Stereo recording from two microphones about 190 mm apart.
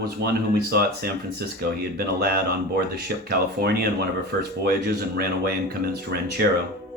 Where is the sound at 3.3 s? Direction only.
55° right (ahead or behind).